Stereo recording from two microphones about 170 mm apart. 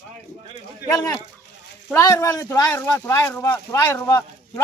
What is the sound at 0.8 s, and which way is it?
Speech, 15° left (ahead or behind).